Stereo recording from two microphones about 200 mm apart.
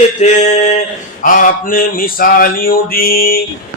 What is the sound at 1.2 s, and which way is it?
Mantra, 40° left (ahead or behind).